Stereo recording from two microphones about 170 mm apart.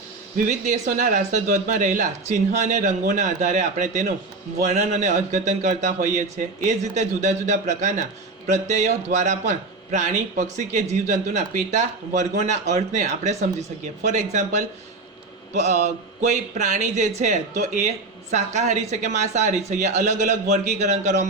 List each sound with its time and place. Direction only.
0.3 s speech: 45° right (ahead or behind)